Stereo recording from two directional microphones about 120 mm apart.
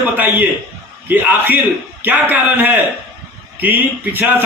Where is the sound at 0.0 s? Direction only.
15° right (ahead or behind).